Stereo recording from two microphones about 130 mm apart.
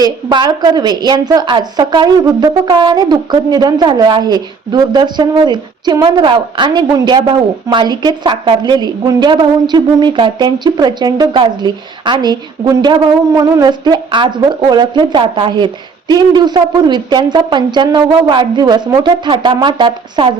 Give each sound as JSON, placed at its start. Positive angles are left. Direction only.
{"t": 0.0, "sound": "a woman's voice", "side_deg": -35}